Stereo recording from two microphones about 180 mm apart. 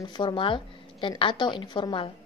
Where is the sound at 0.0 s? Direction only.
25° left (ahead or behind).